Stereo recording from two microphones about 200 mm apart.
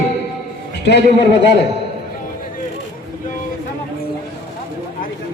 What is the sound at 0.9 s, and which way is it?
Speech, 55° left (ahead or behind).